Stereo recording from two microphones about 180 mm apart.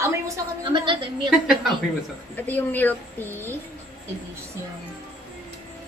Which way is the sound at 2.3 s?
10° left (ahead or behind).